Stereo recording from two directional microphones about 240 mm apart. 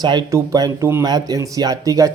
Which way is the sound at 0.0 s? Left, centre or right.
Centre.